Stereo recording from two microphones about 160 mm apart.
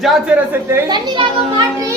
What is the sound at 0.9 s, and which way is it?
Speech, 30° right (ahead or behind).